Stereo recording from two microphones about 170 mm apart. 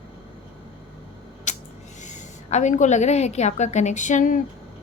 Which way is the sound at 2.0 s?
45° left (ahead or behind).